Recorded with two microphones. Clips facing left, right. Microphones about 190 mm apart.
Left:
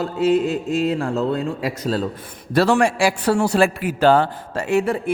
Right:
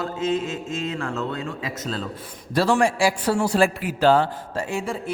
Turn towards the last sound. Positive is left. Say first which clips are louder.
# left 7 dB
turn(degrees=65)  # may be behind; listen again after turning